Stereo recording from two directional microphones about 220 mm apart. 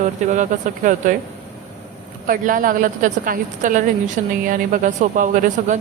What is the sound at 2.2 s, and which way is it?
A man's voice, 40° right (ahead or behind).